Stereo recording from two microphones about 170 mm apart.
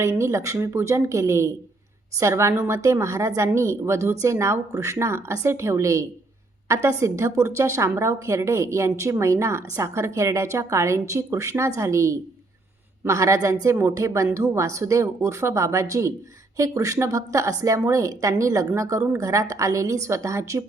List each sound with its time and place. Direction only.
0.0 s a woman's voice: 15° right (ahead or behind)